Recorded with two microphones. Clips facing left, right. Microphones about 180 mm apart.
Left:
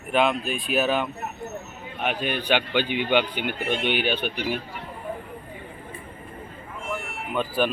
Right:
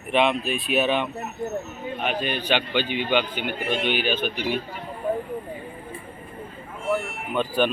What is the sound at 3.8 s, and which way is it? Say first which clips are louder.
Speech: even; 60° left (ahead or behind).